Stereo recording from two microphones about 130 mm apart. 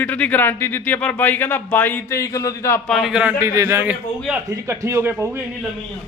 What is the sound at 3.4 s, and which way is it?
Speech, 20° right (ahead or behind).